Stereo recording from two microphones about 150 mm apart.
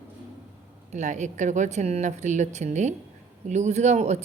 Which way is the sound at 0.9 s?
50° right (ahead or behind).